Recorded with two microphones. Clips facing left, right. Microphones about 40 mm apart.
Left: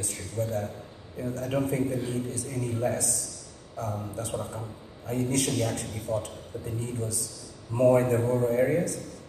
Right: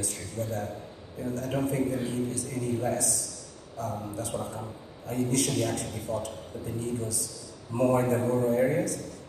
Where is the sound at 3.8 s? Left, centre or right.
Left.